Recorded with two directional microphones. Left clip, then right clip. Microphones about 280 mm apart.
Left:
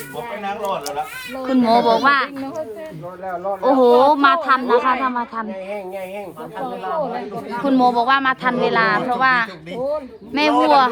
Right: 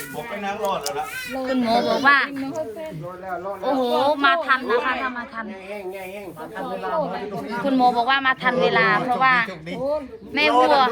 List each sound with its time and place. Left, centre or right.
0.4 s speech: left
1.5 s a woman's voice: centre
3.6 s a woman's voice: left
7.5 s speech: centre